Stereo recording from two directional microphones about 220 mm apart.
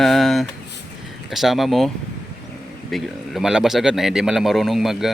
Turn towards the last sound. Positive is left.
turn(degrees=0)  # may be behind; listen again after turning